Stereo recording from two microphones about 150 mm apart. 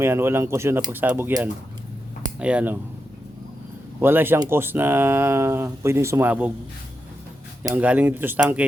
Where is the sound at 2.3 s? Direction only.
10° right (ahead or behind).